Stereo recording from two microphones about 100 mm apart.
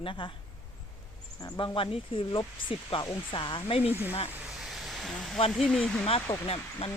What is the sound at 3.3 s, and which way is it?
Speech, 55° left (ahead or behind).